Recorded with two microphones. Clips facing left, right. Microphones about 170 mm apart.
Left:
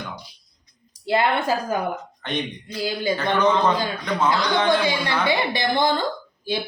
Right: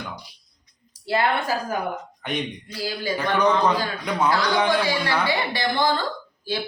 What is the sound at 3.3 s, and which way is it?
Speech, 15° right (ahead or behind).